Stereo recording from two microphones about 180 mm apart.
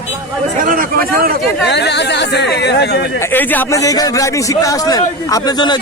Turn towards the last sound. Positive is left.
turn(degrees=25)  # may be behind; listen again after turning